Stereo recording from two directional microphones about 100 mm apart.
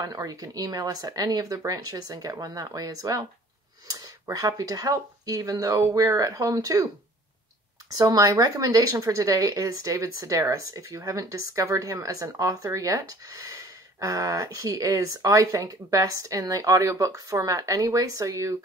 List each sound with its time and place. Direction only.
0.0 s speech: 35° right (ahead or behind)
8.0 s speech: 40° right (ahead or behind)